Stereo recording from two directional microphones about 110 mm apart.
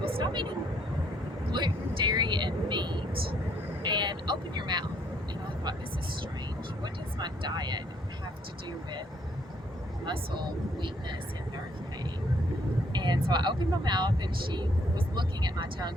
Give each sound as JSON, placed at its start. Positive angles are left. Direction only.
{"t": 0.0, "sound": "vehicle", "side_deg": -55}
{"t": 1.5, "sound": "vehicle", "side_deg": -45}
{"t": 6.8, "sound": "speech", "side_deg": -40}
{"t": 10.1, "sound": "speech", "side_deg": -45}
{"t": 12.9, "sound": "speech", "side_deg": -40}